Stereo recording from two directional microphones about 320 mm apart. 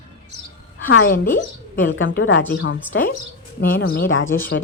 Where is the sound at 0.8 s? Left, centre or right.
Left.